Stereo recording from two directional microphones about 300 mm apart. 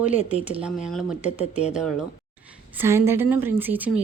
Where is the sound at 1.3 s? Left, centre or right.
Left.